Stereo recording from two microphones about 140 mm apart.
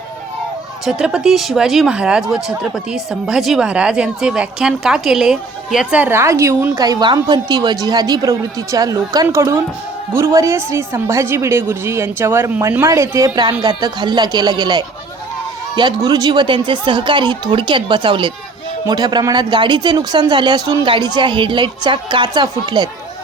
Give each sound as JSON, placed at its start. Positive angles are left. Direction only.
{"t": 0.9, "sound": "a woman's voice", "side_deg": -5}